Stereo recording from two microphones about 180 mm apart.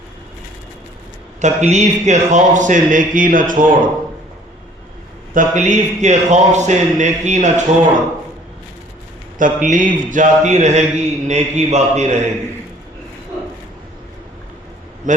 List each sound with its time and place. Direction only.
1.4 s speech: 40° right (ahead or behind)
5.3 s a man's voice: 45° right (ahead or behind)
9.4 s a man's voice: 45° right (ahead or behind)
15.1 s speech: 45° right (ahead or behind)